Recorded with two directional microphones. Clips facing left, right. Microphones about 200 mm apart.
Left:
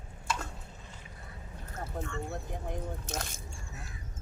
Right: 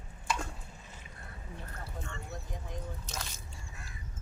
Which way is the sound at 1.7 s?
45° left (ahead or behind).